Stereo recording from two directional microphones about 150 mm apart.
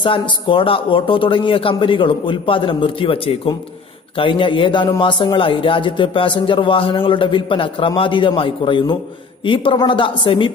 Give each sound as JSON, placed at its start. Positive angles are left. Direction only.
{"t": 0.0, "sound": "a man's voice", "side_deg": 35}